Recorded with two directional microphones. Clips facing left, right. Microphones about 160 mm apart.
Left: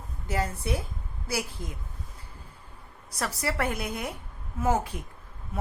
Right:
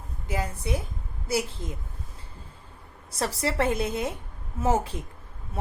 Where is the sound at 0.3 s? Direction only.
15° right (ahead or behind).